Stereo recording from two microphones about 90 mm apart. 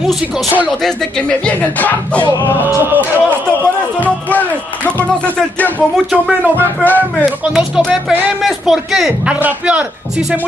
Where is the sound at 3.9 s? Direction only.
15° left (ahead or behind).